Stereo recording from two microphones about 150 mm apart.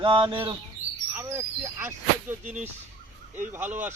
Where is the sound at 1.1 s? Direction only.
15° right (ahead or behind).